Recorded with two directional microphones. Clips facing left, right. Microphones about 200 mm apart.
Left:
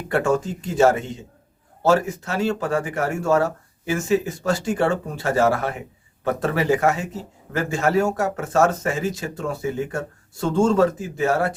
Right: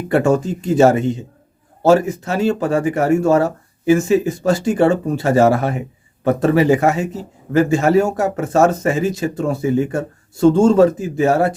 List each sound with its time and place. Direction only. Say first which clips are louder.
0.1 s speech: right 5 dB; 15° right (ahead or behind)